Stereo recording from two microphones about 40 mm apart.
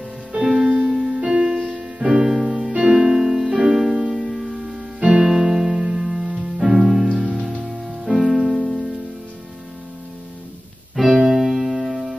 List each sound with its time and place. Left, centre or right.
0.4 s music: centre
0.7 s music: right
6.7 s music: centre
11.0 s music: centre